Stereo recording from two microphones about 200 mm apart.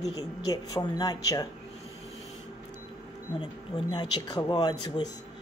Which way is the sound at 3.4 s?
20° left (ahead or behind).